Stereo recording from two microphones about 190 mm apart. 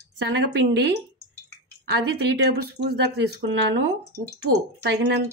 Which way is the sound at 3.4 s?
65° right (ahead or behind).